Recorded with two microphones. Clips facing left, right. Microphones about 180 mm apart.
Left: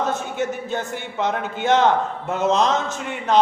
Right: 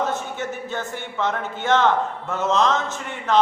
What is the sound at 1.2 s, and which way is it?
A man's voice, 15° left (ahead or behind).